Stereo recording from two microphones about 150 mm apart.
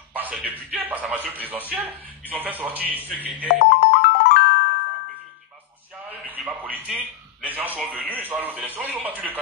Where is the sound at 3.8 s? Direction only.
90° left.